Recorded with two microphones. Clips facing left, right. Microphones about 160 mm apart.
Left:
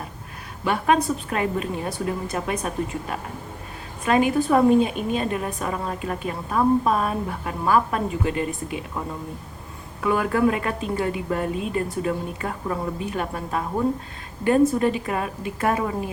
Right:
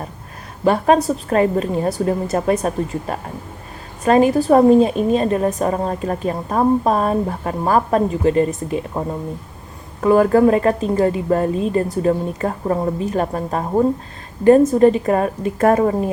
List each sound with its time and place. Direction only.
0.6 s a woman's voice: 35° right (ahead or behind)